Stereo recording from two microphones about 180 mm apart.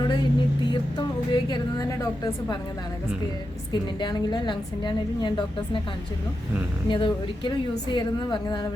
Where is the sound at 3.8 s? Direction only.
25° left (ahead or behind).